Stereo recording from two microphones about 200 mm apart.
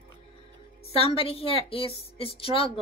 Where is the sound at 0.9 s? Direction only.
30° left (ahead or behind).